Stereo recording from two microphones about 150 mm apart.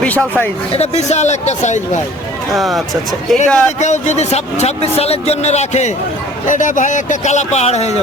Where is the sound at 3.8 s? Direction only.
50° left (ahead or behind).